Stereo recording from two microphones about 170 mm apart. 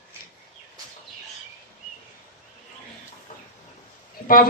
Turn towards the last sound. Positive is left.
turn(degrees=55)  # may be behind; listen again after turning